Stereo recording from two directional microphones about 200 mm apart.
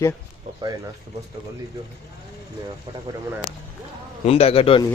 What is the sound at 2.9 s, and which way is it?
Speech, 20° right (ahead or behind).